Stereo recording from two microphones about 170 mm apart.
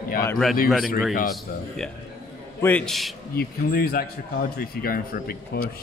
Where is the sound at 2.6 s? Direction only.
10° left (ahead or behind).